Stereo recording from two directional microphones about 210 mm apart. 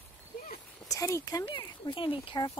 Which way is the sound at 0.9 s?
15° left (ahead or behind).